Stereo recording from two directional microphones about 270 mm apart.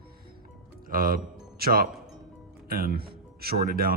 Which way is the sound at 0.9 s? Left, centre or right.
Right.